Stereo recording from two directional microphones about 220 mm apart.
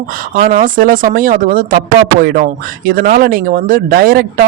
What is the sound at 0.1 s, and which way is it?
Speech, 40° right (ahead or behind).